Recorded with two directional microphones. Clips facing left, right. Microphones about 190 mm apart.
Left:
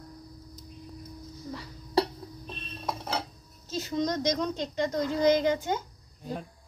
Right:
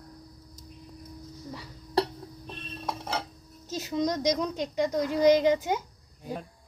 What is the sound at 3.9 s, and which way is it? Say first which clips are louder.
A woman's voice: right 2 dB; 15° right (ahead or behind).